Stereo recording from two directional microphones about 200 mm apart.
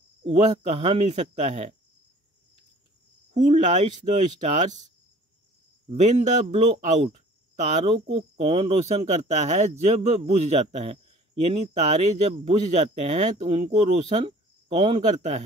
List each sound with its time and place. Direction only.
0.2 s cricket: 35° right (ahead or behind)
0.7 s speech: 30° right (ahead or behind)
3.4 s speech: 35° right (ahead or behind)
5.9 s speech: 35° right (ahead or behind)